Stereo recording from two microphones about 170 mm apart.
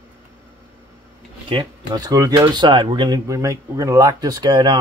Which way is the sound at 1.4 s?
30° right (ahead or behind).